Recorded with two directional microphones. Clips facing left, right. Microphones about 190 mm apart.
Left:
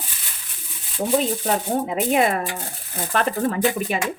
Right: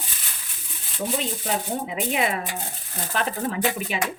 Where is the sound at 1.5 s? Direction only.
45° left (ahead or behind).